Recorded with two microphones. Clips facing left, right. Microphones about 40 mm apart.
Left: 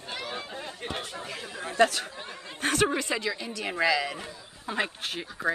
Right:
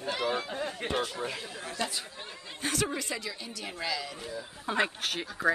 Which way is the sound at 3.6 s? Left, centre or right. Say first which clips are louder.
Left 9 dB; left.